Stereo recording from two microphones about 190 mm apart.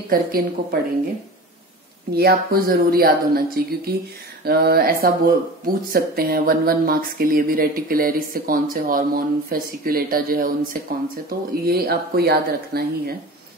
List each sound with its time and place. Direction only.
0.1 s speech: 50° right (ahead or behind)
2.1 s speech: 50° right (ahead or behind)